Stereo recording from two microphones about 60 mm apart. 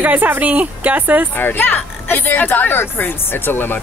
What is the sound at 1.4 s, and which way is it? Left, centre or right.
Speech, left.